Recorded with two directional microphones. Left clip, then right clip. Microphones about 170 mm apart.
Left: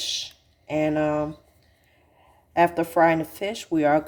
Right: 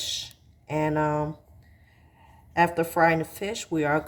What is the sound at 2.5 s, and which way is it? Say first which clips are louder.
Speech: left 3 dB; 20° left (ahead or behind).